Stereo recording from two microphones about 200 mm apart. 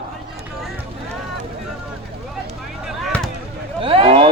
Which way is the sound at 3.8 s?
30° right (ahead or behind).